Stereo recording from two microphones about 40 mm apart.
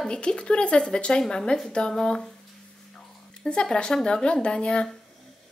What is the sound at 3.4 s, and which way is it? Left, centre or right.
A woman's voice, left.